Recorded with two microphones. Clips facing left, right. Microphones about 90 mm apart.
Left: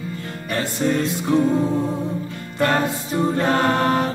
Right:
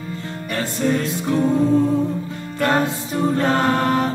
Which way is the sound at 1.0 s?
20° left (ahead or behind).